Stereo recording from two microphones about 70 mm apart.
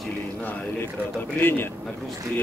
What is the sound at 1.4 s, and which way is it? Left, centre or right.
Speech, left.